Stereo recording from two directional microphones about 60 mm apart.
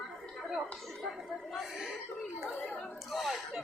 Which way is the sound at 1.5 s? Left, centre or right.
Centre.